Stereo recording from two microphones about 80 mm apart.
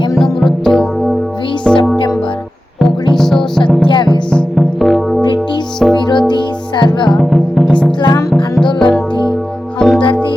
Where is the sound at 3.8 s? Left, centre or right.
Left.